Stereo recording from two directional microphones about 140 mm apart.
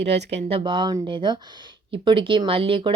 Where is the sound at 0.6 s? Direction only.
35° right (ahead or behind).